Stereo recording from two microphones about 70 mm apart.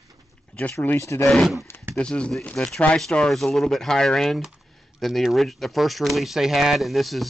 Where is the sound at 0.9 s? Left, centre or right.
Left.